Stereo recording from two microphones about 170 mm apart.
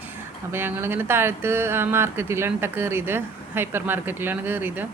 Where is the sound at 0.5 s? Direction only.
10° right (ahead or behind).